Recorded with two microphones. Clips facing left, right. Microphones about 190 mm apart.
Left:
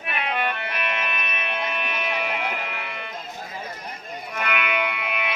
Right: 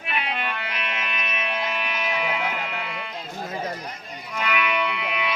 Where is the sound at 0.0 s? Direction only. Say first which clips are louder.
Left 2 dB; 55° left (ahead or behind).